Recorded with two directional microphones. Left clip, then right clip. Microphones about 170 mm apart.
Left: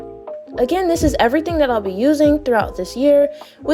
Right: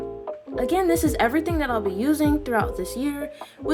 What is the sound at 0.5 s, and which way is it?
A woman's voice, 35° left (ahead or behind).